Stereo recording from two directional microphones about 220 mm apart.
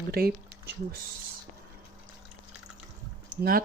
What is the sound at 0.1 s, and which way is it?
Speech, 45° right (ahead or behind).